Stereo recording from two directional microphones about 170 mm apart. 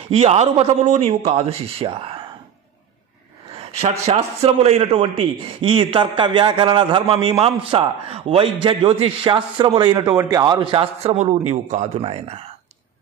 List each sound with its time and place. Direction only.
0.1 s a man's voice: 40° right (ahead or behind)
3.5 s a man's voice: 35° right (ahead or behind)